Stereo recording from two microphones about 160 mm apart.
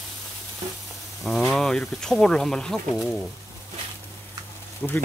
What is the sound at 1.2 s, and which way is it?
Speech, centre (ahead or behind).